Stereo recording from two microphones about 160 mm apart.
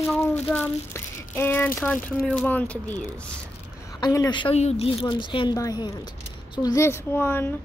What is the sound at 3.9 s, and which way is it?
Speech, 25° left (ahead or behind).